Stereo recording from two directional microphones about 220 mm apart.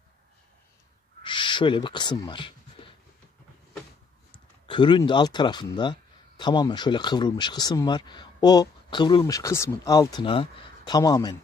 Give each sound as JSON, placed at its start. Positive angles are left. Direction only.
{"t": 1.2, "sound": "owl", "side_deg": 20}
{"t": 4.3, "sound": "speech", "side_deg": 20}